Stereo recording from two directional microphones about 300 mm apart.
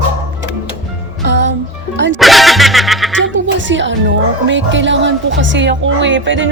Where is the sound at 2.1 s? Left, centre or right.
Centre.